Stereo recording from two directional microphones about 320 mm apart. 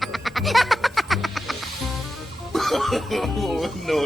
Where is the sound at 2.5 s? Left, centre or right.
Centre.